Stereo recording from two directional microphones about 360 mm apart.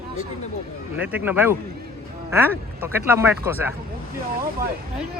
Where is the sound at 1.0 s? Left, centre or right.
Centre.